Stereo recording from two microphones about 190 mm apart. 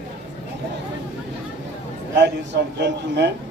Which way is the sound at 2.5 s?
65° right (ahead or behind).